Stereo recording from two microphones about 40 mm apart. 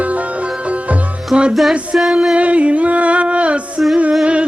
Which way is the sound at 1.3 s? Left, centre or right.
Centre.